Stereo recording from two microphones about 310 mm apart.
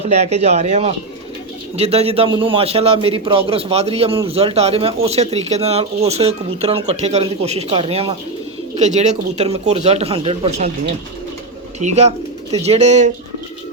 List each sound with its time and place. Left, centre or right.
0.0 s a man's voice: right
11.8 s a man's voice: right